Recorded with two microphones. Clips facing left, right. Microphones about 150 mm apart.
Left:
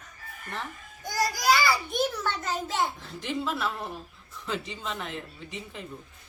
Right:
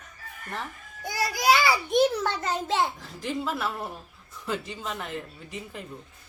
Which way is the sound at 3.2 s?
10° right (ahead or behind).